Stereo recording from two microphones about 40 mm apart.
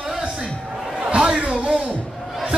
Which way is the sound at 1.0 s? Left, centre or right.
Right.